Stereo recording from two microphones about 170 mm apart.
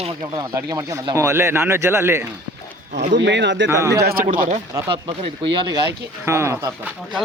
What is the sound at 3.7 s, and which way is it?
Speech, 15° right (ahead or behind).